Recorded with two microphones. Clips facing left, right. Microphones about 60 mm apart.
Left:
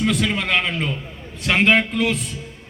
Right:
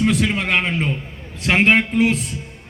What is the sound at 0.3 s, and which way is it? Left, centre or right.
A man's voice, right.